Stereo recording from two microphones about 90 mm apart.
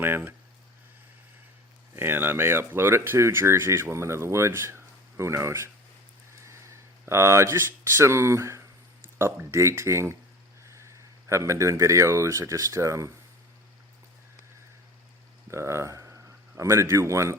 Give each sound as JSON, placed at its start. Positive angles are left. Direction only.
{"t": 0.0, "sound": "speech", "side_deg": -25}
{"t": 2.0, "sound": "speech", "side_deg": -25}
{"t": 15.4, "sound": "speech", "side_deg": -35}